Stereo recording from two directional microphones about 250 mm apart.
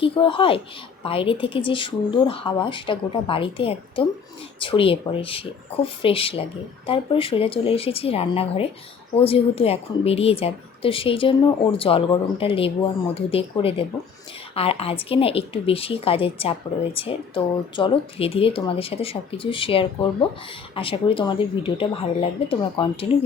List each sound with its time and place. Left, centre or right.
0.0 s a woman's voice: left